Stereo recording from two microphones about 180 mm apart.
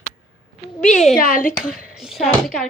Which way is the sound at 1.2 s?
50° left (ahead or behind).